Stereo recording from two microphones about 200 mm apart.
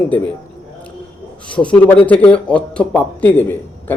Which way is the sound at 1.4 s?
5° left (ahead or behind).